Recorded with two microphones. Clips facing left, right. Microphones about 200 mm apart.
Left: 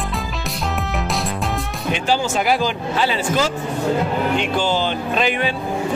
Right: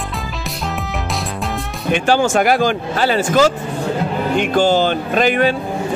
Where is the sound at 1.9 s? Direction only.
55° right (ahead or behind).